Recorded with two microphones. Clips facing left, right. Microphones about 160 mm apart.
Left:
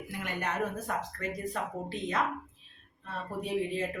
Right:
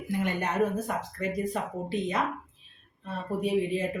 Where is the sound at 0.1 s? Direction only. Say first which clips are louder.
Right 7 dB; 20° right (ahead or behind).